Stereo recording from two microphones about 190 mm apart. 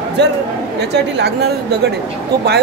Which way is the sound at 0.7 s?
65° right (ahead or behind).